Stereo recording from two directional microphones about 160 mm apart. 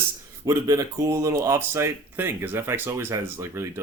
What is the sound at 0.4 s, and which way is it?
Speech, 20° right (ahead or behind).